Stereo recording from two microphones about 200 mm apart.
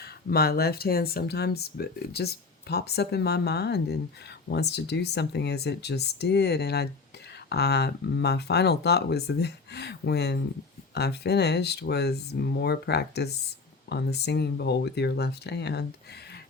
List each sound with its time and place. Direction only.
0.0 s speech: 50° left (ahead or behind)